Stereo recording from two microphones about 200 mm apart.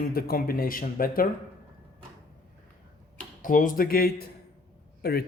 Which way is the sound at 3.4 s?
40° left (ahead or behind).